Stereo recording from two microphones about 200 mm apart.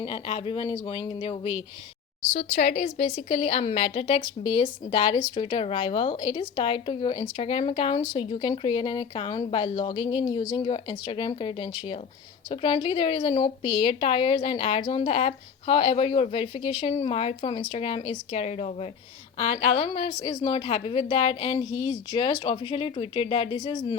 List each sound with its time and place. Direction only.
0.0 s speech: 25° left (ahead or behind)